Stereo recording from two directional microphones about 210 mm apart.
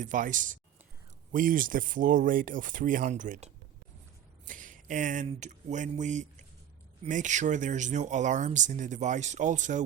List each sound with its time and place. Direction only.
0.0 s speech: 40° right (ahead or behind)